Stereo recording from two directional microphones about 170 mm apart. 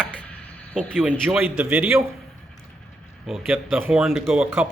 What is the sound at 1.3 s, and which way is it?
Speech, 10° right (ahead or behind).